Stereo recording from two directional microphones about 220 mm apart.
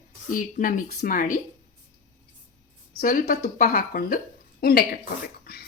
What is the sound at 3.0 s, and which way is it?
A woman's voice, 35° left (ahead or behind).